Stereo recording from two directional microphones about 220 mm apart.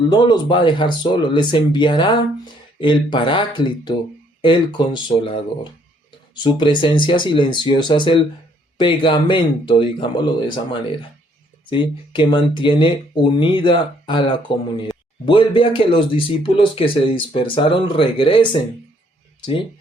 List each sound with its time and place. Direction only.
0.1 s speech: 20° left (ahead or behind)